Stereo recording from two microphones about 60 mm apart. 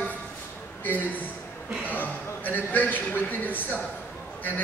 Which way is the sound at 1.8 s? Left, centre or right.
Left.